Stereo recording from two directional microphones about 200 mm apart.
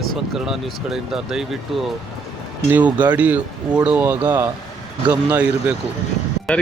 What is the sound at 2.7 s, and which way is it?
Speech, 10° right (ahead or behind).